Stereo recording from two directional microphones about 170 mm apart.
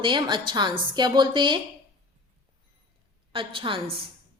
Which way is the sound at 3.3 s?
30° right (ahead or behind).